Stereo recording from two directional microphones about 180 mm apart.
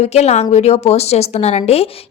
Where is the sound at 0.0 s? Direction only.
35° left (ahead or behind).